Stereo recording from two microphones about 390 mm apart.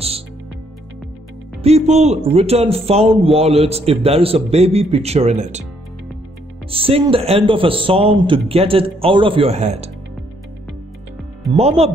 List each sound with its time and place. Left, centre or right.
1.6 s a man's voice: centre
6.7 s a man's voice: centre
11.5 s a man's voice: centre